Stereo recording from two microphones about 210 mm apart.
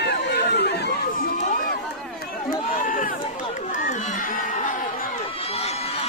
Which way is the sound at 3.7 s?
40° left (ahead or behind).